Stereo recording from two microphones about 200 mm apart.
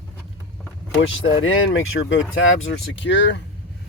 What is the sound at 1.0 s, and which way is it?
Speech, 75° left (ahead or behind).